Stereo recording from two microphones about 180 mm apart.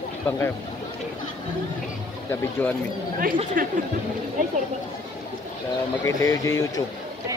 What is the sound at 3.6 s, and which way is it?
Speech, 50° right (ahead or behind).